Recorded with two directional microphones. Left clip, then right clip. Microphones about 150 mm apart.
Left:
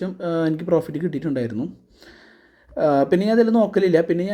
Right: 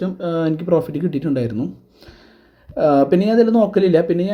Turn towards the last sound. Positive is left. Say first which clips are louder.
# right 3 dB
turn(degrees=10)  # may be behind; listen again after turning